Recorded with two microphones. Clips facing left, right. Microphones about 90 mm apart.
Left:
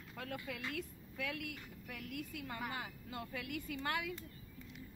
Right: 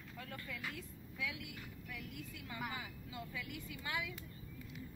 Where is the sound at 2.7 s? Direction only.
60° left (ahead or behind).